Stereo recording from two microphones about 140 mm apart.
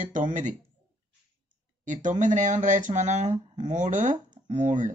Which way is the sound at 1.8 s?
65° right (ahead or behind).